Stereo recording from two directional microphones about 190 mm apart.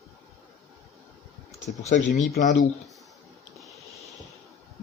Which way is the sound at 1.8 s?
35° left (ahead or behind).